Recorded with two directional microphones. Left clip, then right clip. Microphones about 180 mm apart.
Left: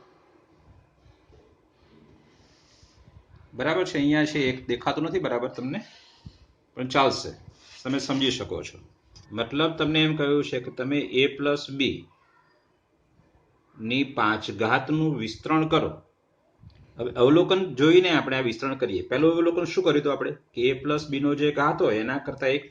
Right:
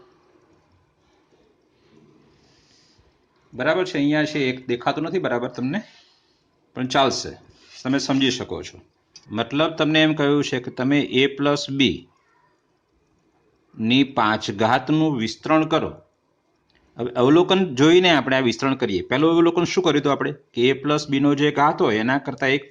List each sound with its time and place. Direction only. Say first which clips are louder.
3.6 s a man's voice: right 4 dB; 25° right (ahead or behind); by 11.9 s 55° right (ahead or behind)
13.8 s a man's voice: right 5 dB; 55° right (ahead or behind)
17.0 s a man's voice: right 3 dB; 45° right (ahead or behind)